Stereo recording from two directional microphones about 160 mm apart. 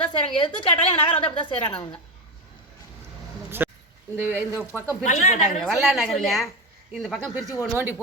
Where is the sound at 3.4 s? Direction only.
15° right (ahead or behind).